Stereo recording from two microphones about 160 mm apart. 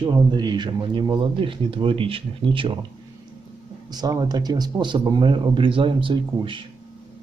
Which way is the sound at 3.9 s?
25° right (ahead or behind).